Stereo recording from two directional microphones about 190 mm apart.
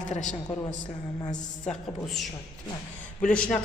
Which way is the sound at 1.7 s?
Centre (ahead or behind).